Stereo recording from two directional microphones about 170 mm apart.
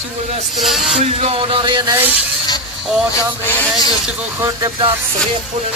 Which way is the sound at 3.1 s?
10° left (ahead or behind).